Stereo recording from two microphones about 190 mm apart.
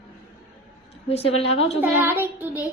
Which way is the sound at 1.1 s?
30° left (ahead or behind).